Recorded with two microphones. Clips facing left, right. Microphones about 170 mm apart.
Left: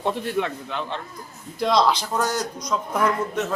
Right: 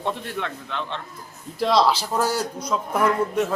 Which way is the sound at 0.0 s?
5° left (ahead or behind).